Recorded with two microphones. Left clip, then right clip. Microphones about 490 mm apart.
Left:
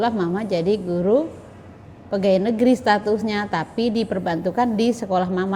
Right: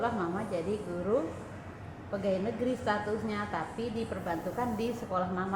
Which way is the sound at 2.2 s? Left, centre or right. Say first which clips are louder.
Left 14 dB; left.